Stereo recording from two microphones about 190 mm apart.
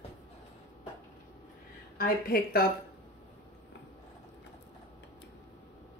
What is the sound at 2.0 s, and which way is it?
Speech, 50° left (ahead or behind).